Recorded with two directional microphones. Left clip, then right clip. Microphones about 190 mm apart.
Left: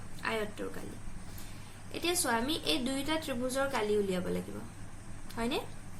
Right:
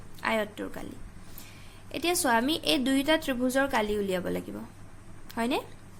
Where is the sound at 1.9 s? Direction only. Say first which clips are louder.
Right 6 dB; 55° right (ahead or behind).